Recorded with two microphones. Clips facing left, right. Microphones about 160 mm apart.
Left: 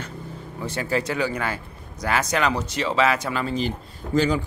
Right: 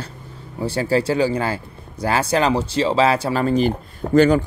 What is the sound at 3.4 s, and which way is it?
Speech, 55° right (ahead or behind).